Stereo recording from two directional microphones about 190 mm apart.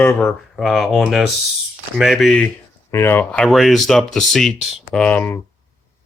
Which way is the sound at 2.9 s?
10° left (ahead or behind).